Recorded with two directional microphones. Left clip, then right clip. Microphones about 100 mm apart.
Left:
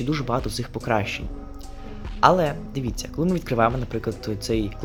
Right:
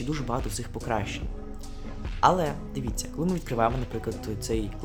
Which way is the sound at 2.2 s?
25° left (ahead or behind).